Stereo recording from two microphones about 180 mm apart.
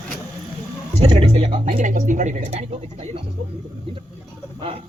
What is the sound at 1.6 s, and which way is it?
Speech, 45° right (ahead or behind).